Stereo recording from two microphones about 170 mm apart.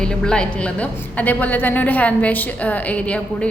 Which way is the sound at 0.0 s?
5° left (ahead or behind).